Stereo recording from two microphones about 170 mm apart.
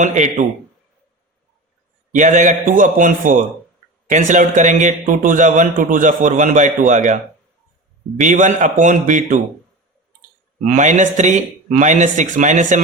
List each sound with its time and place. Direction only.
0.0 s a man's voice: 45° right (ahead or behind)
2.1 s a man's voice: 45° right (ahead or behind)
8.2 s a man's voice: 45° right (ahead or behind)
10.7 s a man's voice: 45° right (ahead or behind)